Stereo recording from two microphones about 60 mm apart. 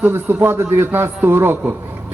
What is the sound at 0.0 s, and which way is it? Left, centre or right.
A man's voice, right.